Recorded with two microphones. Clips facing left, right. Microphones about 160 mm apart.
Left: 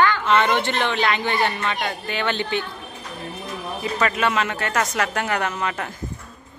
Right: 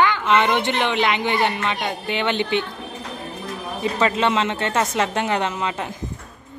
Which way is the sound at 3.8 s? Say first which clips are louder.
Right 2 dB; 25° right (ahead or behind).